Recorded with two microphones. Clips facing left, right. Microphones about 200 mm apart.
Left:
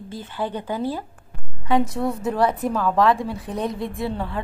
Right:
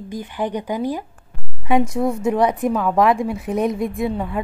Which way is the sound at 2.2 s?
15° right (ahead or behind).